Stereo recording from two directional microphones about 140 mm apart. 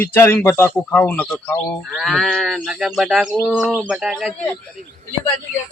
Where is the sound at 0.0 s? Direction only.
15° left (ahead or behind); by 4.4 s 5° right (ahead or behind).